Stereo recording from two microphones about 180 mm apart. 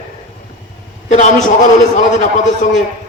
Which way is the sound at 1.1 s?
40° left (ahead or behind).